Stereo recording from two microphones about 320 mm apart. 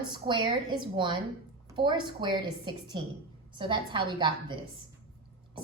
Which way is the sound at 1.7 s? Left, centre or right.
Centre.